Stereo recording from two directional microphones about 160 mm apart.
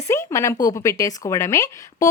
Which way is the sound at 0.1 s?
20° left (ahead or behind).